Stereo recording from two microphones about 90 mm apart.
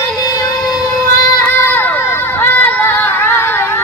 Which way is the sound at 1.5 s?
25° left (ahead or behind).